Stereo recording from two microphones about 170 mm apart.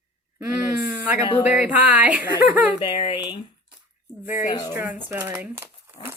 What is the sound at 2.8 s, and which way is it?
Speech, 30° left (ahead or behind).